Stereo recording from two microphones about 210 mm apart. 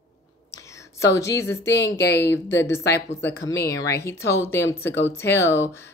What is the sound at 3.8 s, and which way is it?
Speech, 50° left (ahead or behind).